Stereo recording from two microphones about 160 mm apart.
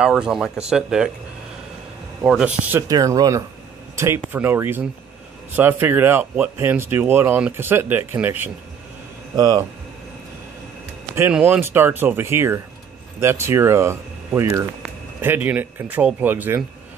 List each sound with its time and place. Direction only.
0.0 s speech: 5° right (ahead or behind)
2.2 s speech: 5° right (ahead or behind)
2.9 s speech: 20° right (ahead or behind)
11.1 s speech: 10° right (ahead or behind)